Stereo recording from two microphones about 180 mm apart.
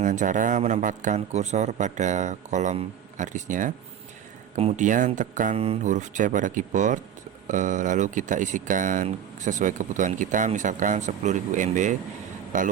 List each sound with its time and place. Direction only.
0.0 s a man's voice: 45° right (ahead or behind)